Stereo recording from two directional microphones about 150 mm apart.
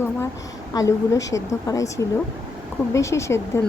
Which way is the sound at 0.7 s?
20° left (ahead or behind).